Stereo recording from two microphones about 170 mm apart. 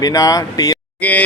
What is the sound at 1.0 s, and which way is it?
Speech, 10° left (ahead or behind).